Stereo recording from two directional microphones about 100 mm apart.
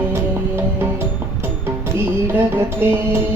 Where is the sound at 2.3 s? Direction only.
20° right (ahead or behind).